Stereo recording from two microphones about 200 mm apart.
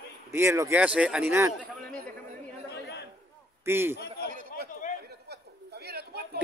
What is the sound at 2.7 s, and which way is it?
Chatter, 55° left (ahead or behind).